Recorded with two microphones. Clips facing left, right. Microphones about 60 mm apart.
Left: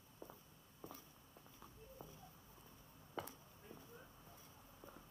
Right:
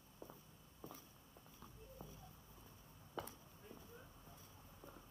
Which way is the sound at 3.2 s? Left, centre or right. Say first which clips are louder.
Even; centre.